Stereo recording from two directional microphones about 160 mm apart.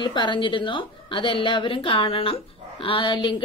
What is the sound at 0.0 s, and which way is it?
A woman's voice, 30° left (ahead or behind).